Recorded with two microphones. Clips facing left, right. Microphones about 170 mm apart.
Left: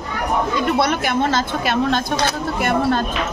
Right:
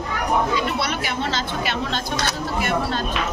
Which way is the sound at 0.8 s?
50° left (ahead or behind).